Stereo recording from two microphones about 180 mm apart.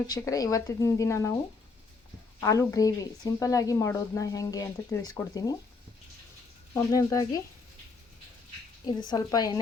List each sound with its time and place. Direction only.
0.1 s a woman's voice: 20° left (ahead or behind)
2.4 s a woman's voice: 15° left (ahead or behind)
6.7 s a woman's voice: 20° left (ahead or behind)
8.9 s a woman's voice: 25° left (ahead or behind)